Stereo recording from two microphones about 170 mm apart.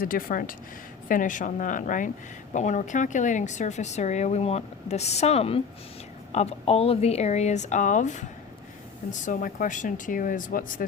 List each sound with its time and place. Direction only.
0.0 s speech: 55° left (ahead or behind)